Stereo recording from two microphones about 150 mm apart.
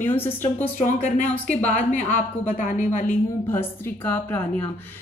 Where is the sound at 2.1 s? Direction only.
55° left (ahead or behind).